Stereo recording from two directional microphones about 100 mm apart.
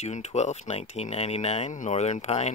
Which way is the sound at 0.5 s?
90° left.